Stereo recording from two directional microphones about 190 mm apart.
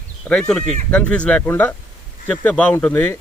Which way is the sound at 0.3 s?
5° left (ahead or behind).